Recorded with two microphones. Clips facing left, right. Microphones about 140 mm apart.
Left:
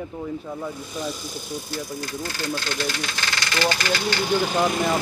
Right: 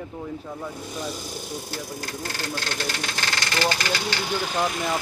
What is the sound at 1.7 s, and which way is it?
Speech, 65° right (ahead or behind).